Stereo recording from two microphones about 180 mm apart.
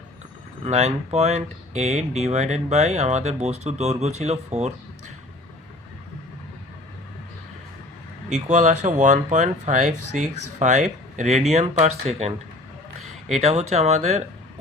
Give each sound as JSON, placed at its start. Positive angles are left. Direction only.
{"t": 0.6, "sound": "speech", "side_deg": -40}
{"t": 8.3, "sound": "speech", "side_deg": -40}